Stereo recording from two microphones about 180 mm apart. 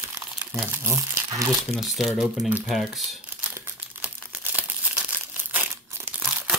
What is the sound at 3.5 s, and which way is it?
Crumpling, 10° right (ahead or behind).